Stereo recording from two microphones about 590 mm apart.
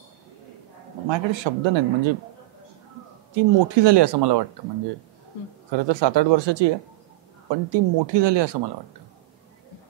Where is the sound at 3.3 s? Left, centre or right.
Right.